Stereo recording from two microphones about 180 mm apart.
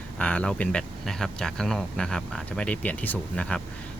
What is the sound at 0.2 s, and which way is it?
Speech, 5° left (ahead or behind).